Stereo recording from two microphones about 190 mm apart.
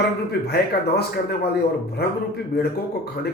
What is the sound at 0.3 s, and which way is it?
A man's voice, 60° left (ahead or behind).